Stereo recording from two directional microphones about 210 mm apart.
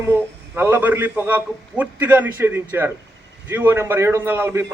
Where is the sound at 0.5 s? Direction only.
10° right (ahead or behind).